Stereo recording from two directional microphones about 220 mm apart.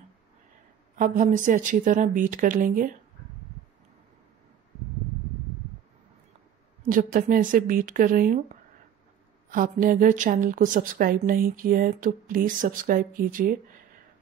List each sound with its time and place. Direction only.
0.9 s speech: 35° right (ahead or behind)
6.9 s speech: 40° right (ahead or behind)
9.5 s speech: 40° right (ahead or behind)